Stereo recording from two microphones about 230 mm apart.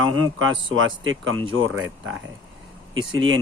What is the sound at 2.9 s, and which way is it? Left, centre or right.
Speech, right.